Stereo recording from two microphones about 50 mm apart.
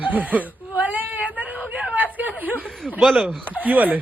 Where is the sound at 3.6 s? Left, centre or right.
Right.